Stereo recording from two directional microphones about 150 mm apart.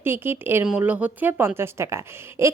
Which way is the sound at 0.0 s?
15° right (ahead or behind).